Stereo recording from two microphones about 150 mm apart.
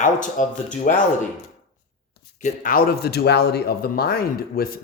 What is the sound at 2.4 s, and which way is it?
Speech, 65° left (ahead or behind).